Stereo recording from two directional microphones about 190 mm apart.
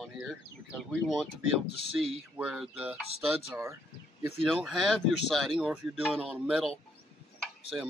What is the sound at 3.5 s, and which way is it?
Speech, 15° right (ahead or behind).